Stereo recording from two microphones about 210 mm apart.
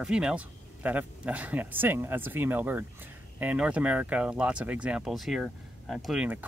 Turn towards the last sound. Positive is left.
turn(degrees=-5)  # may be behind; listen again after turning